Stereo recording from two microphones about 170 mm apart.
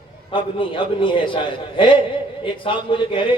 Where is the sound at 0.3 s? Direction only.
30° left (ahead or behind).